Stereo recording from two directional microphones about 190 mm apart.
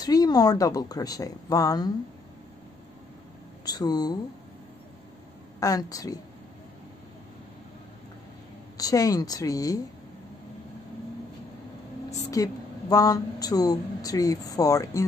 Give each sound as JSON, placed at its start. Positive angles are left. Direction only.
{"t": 0.0, "sound": "speech", "side_deg": 20}
{"t": 3.6, "sound": "speech", "side_deg": 20}
{"t": 5.6, "sound": "a woman's voice", "side_deg": 15}
{"t": 8.7, "sound": "speech", "side_deg": 20}
{"t": 12.4, "sound": "a woman's voice", "side_deg": 20}